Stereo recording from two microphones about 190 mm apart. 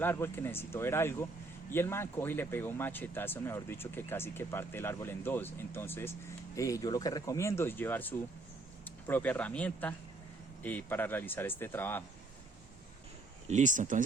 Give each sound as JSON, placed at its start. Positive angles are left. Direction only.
{"t": 0.0, "sound": "speech", "side_deg": 10}
{"t": 13.5, "sound": "speech", "side_deg": -40}